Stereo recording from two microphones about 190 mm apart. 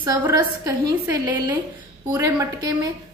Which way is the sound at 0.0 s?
20° right (ahead or behind).